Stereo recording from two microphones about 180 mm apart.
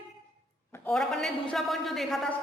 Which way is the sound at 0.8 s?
Centre (ahead or behind).